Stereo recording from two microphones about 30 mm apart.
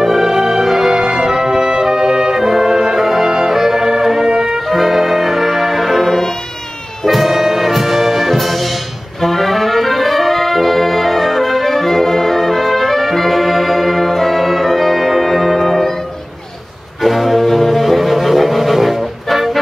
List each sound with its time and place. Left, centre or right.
0.0 s music: centre
0.9 s music: right
2.3 s brass instrument: centre
4.6 s music: centre
7.1 s music: centre
17.0 s music: centre